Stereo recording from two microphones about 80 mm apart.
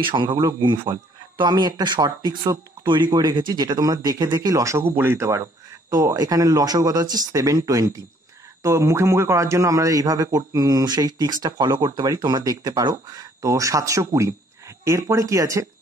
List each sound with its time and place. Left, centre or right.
0.0 s a man's voice: right
0.4 s a man's voice: right
1.4 s speech: right
4.8 s speech: right
5.9 s speech: right